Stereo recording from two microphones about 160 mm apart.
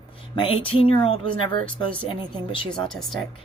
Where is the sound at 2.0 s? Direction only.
30° left (ahead or behind).